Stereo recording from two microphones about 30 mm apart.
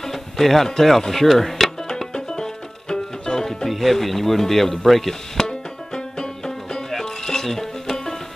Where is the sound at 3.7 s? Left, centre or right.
Centre.